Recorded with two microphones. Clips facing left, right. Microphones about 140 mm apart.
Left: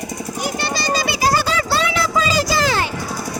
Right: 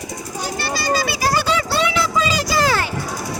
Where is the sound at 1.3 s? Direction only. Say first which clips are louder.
Even; 40° left (ahead or behind).